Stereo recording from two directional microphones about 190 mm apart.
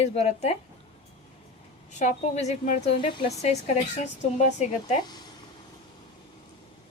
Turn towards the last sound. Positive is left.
turn(degrees=20)  # may be behind; listen again after turning